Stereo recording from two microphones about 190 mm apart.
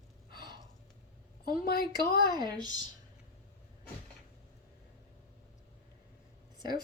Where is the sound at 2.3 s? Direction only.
20° right (ahead or behind).